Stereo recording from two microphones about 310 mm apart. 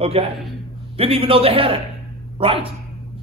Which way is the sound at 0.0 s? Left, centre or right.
Centre.